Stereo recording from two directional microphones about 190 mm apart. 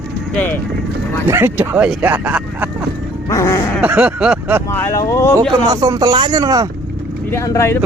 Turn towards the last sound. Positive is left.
turn(degrees=15)  # may be behind; listen again after turning